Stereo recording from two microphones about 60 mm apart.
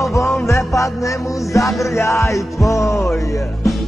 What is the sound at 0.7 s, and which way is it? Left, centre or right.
Music, left.